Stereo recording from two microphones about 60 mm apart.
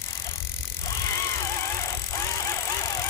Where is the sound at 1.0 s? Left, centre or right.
Left.